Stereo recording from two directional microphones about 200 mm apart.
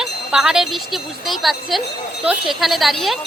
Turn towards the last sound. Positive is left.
turn(degrees=0)  # may be behind; listen again after turning